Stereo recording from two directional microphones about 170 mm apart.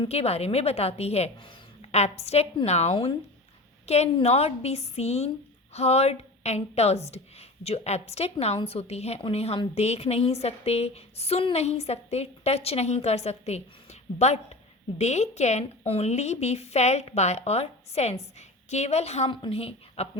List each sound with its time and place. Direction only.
0.0 s a woman's voice: 35° left (ahead or behind)